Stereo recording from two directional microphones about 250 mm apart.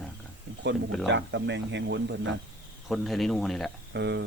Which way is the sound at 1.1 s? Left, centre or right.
Right.